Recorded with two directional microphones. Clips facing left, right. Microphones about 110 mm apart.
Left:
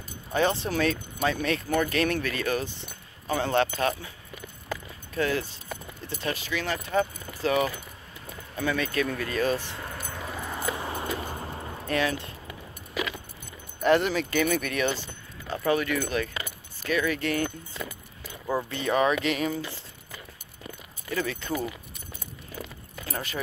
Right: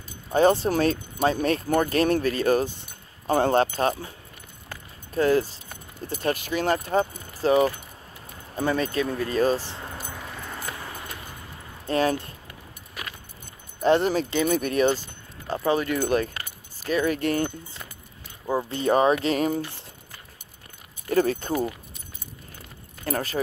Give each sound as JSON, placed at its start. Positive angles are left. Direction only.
{"t": 0.3, "sound": "speech", "side_deg": -40}
{"t": 5.1, "sound": "speech", "side_deg": -40}
{"t": 6.0, "sound": "speech", "side_deg": -50}
{"t": 9.0, "sound": "speech", "side_deg": -25}
{"t": 9.8, "sound": "dog", "side_deg": -10}
{"t": 10.1, "sound": "dog", "side_deg": 5}
{"t": 10.9, "sound": "keys jangling", "side_deg": 30}
{"t": 11.9, "sound": "speech", "side_deg": -40}
{"t": 13.0, "sound": "keys jangling", "side_deg": 90}
{"t": 13.8, "sound": "speech", "side_deg": -35}
{"t": 18.7, "sound": "speech", "side_deg": -35}
{"t": 21.1, "sound": "speech", "side_deg": -45}
{"t": 23.0, "sound": "speech", "side_deg": -40}